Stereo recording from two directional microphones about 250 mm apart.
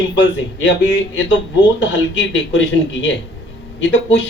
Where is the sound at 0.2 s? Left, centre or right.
Left.